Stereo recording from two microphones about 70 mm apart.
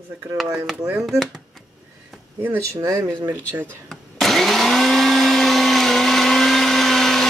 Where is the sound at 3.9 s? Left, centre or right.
Centre.